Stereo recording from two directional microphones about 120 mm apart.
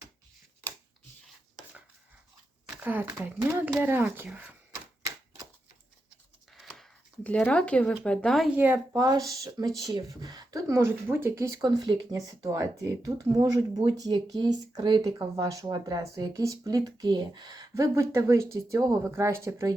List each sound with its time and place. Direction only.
2.8 s speech: 15° right (ahead or behind)
6.5 s a sound: centre (ahead or behind)
7.3 s speech: 10° left (ahead or behind)
8.4 s speech: 15° right (ahead or behind)
9.0 s speech: 30° right (ahead or behind)